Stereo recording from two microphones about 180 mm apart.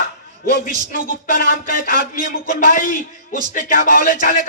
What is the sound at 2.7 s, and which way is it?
A man's voice, 45° left (ahead or behind).